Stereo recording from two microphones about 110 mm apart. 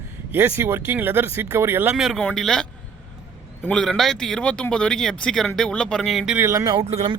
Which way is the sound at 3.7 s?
5° left (ahead or behind).